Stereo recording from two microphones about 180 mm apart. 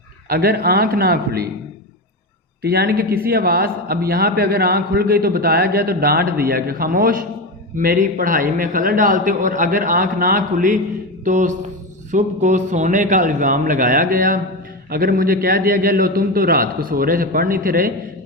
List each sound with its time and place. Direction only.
0.3 s speech: 60° right (ahead or behind)
2.6 s a man's voice: 60° right (ahead or behind)